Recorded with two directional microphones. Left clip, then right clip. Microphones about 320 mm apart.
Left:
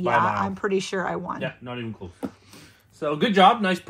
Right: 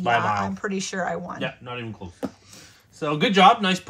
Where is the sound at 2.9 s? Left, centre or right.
Right.